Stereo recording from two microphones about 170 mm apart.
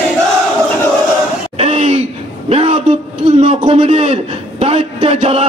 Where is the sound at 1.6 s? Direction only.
40° right (ahead or behind).